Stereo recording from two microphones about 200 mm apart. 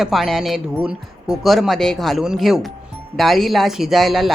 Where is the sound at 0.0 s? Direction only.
Centre (ahead or behind).